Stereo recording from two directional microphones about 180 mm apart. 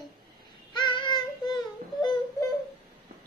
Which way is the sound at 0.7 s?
25° left (ahead or behind).